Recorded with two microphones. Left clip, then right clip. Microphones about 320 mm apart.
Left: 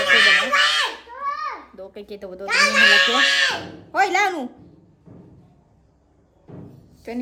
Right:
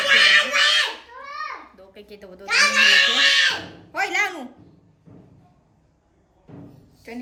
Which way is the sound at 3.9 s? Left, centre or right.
Centre.